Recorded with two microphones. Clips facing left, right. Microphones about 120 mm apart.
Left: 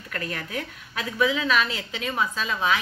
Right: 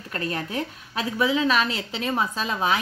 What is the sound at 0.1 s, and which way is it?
A woman's voice, 30° right (ahead or behind).